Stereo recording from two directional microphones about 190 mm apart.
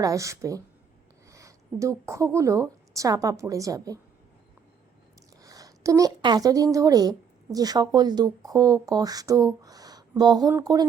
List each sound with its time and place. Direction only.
0.0 s a woman's voice: 15° right (ahead or behind)
5.4 s a woman's voice: 20° right (ahead or behind)